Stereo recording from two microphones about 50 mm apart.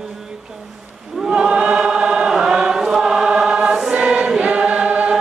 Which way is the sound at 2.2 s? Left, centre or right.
Centre.